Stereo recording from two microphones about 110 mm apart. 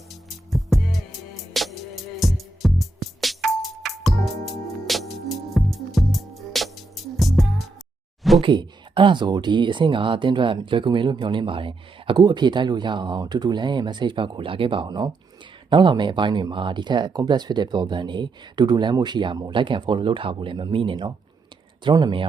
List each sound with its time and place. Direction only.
0.1 s music: centre (ahead or behind)
4.9 s music: centre (ahead or behind)
8.4 s speech: 50° right (ahead or behind)